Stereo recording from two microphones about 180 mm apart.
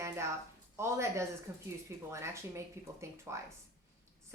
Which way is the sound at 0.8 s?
15° right (ahead or behind).